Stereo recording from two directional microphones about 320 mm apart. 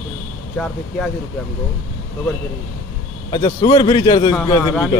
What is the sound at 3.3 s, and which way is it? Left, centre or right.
Speech, centre.